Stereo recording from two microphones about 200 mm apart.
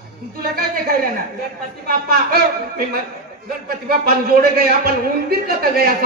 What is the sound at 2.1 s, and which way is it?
Speech, 50° right (ahead or behind).